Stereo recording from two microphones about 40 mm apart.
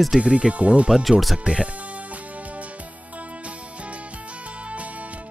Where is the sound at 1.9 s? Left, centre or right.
Right.